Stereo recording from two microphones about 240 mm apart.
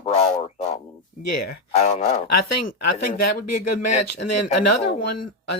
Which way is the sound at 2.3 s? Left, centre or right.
Left.